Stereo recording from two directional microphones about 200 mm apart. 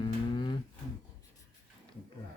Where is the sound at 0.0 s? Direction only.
25° left (ahead or behind).